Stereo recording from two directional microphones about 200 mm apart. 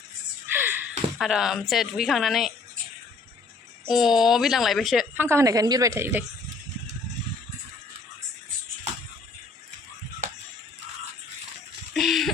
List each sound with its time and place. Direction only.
0.5 s speech: 10° right (ahead or behind)
3.8 s a woman's voice: centre (ahead or behind)
11.9 s a sound: centre (ahead or behind)